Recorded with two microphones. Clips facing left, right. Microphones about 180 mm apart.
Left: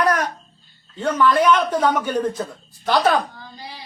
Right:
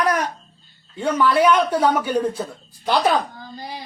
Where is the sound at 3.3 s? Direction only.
45° right (ahead or behind).